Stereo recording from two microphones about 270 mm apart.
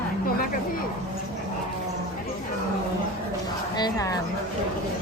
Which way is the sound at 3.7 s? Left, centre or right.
Centre.